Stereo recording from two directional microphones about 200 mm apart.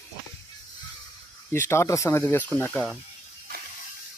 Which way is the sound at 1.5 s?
10° left (ahead or behind).